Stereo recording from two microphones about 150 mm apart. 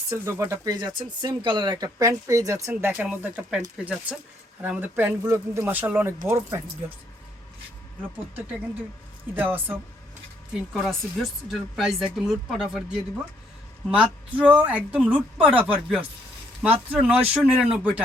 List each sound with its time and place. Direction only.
0.1 s speech: 20° right (ahead or behind)
4.6 s speech: 10° right (ahead or behind)
9.3 s speech: 15° right (ahead or behind)
10.5 s speech: centre (ahead or behind)